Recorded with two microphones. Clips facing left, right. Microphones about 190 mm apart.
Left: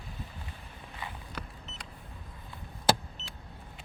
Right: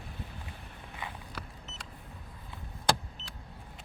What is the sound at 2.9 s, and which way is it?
Vehicle, 5° left (ahead or behind).